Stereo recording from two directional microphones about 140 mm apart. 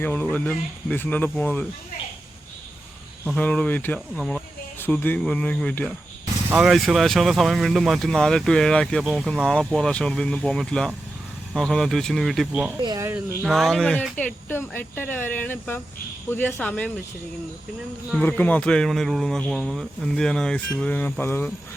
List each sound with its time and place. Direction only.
0.0 s speech: 15° left (ahead or behind)
3.3 s speech: 10° left (ahead or behind)
6.6 s speech: centre (ahead or behind)
12.7 s speech: 25° right (ahead or behind)
13.1 s speech: 15° right (ahead or behind)
13.4 s speech: centre (ahead or behind)
18.2 s speech: 10° left (ahead or behind)